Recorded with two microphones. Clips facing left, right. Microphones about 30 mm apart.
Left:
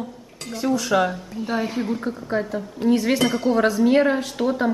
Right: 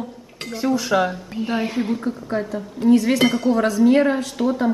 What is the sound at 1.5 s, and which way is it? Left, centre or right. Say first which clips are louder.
Speech: right 1 dB; right.